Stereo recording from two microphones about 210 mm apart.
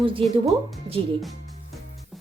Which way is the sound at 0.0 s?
25° right (ahead or behind).